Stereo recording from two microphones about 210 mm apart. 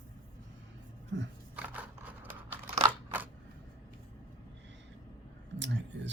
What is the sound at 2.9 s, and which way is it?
Crunch, 10° right (ahead or behind).